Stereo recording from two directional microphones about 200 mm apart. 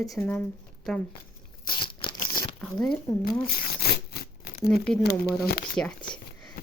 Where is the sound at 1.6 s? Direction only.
25° left (ahead or behind).